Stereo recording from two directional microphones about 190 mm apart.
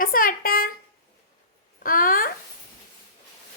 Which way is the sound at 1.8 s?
45° left (ahead or behind).